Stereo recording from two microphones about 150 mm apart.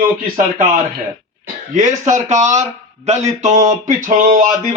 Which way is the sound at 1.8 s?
55° right (ahead or behind).